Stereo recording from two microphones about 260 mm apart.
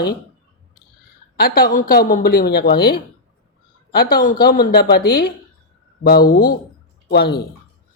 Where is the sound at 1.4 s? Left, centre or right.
Left.